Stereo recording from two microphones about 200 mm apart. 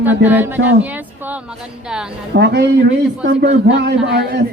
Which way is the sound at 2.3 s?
55° right (ahead or behind).